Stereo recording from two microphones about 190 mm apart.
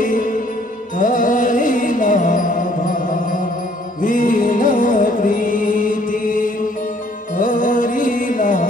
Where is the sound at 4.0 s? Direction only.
45° left (ahead or behind).